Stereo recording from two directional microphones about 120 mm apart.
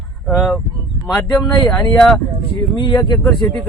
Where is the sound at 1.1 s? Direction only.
10° left (ahead or behind).